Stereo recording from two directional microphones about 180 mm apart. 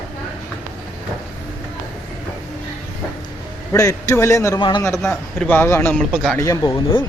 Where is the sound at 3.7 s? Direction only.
20° left (ahead or behind).